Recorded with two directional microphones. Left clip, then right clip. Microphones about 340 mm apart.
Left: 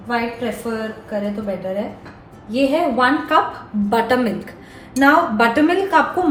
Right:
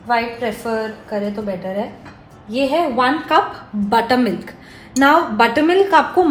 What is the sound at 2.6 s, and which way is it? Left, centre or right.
A woman's voice, right.